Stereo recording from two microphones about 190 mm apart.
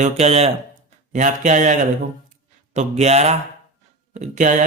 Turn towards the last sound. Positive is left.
turn(degrees=-40)  # may be behind; listen again after turning